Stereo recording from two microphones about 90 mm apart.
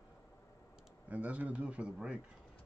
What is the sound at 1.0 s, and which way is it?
Speech, 15° right (ahead or behind).